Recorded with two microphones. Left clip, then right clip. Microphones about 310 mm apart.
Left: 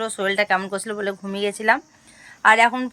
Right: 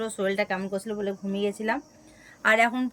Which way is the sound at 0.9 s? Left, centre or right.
Left.